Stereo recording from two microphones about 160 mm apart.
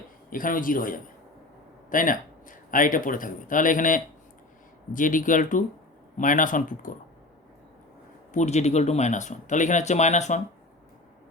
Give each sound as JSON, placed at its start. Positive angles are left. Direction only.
{"t": 0.3, "sound": "speech", "side_deg": 60}
{"t": 8.3, "sound": "speech", "side_deg": 45}